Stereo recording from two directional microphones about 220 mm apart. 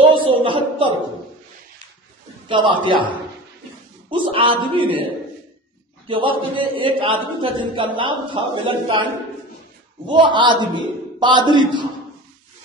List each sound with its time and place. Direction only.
0.2 s a sound: 25° right (ahead or behind)
2.4 s a man's voice: 20° right (ahead or behind)
4.1 s a man's voice: 25° right (ahead or behind)
6.0 s a man's voice: 25° right (ahead or behind)
10.0 s a man's voice: 20° right (ahead or behind)